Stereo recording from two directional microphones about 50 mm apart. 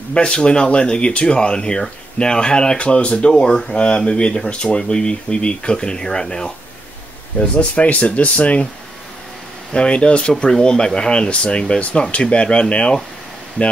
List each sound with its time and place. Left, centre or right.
0.1 s speech: left
7.3 s speech: left
9.7 s speech: left